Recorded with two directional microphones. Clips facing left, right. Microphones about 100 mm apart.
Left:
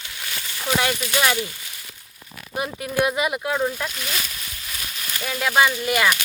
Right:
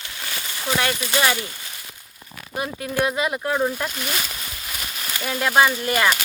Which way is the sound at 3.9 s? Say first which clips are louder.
Right 3 dB; 20° right (ahead or behind).